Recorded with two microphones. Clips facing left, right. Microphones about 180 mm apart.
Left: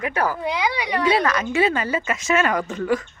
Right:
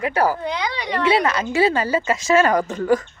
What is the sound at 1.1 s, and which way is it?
A woman's voice, 25° right (ahead or behind).